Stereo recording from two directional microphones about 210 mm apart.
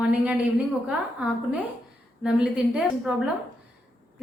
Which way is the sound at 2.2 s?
5° right (ahead or behind).